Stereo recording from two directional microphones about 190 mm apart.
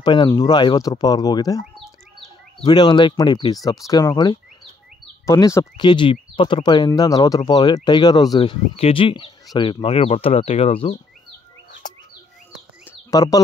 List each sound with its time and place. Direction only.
0.0 s speech: 25° left (ahead or behind)
2.6 s speech: 25° left (ahead or behind)
13.1 s speech: 20° left (ahead or behind)